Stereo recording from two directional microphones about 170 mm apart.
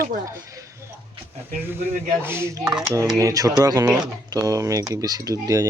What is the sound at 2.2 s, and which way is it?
Speech, 15° right (ahead or behind).